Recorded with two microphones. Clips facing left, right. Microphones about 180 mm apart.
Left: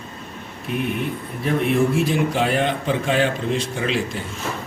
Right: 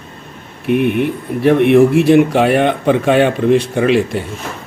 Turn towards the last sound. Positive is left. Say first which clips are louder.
# right 10 dB
turn(degrees=-65)  # may be behind; listen again after turning